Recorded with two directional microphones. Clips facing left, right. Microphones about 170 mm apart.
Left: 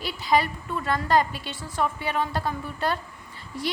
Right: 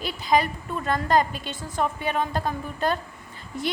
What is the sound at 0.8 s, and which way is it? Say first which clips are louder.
Speech: right 1 dB; 45° right (ahead or behind).